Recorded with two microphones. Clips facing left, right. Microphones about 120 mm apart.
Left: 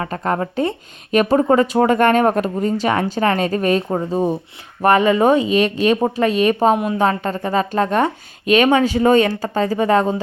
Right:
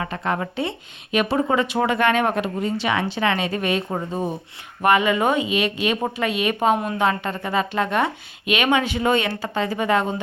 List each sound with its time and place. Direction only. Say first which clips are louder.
0.0 s speech: left 4 dB; 40° left (ahead or behind)
3.8 s a woman's voice: left 7 dB; 30° left (ahead or behind)